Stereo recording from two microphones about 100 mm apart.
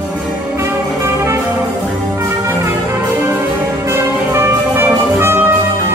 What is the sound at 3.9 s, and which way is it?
Music, 25° right (ahead or behind).